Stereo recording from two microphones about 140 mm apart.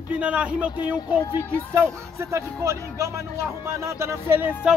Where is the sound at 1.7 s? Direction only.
20° right (ahead or behind).